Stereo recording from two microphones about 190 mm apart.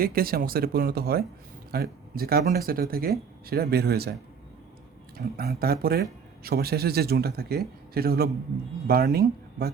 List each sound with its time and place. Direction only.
0.0 s speech: 50° right (ahead or behind)
5.1 s speech: 55° right (ahead or behind)